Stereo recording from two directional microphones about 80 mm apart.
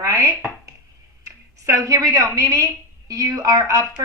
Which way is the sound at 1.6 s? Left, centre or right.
Right.